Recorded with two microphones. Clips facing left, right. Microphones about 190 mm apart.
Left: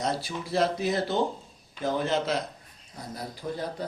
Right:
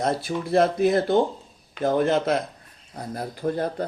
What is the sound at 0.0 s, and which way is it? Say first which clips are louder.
A man's voice: right 5 dB; 55° right (ahead or behind).